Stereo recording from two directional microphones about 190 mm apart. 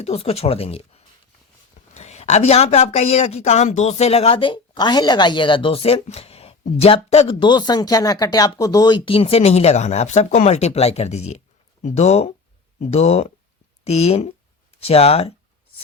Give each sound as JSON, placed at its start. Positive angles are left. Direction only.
{"t": 0.0, "sound": "a woman's voice", "side_deg": 30}